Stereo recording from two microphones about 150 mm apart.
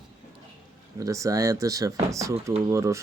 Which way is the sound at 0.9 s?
20° right (ahead or behind).